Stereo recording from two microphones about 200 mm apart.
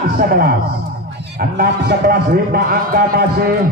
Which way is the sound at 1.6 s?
50° right (ahead or behind).